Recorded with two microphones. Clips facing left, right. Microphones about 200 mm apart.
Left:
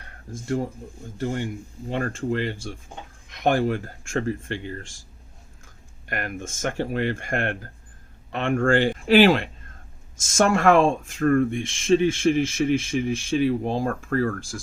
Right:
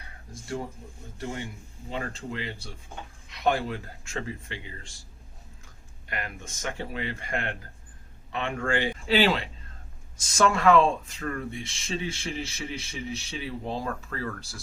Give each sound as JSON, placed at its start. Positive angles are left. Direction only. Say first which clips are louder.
{"t": 1.2, "sound": "speech", "louder": "left 8 dB", "side_deg": 55}
{"t": 6.1, "sound": "speech", "louder": "left 6 dB", "side_deg": 50}